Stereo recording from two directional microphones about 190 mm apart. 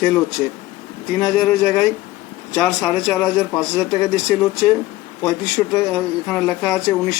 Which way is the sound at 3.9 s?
20° left (ahead or behind).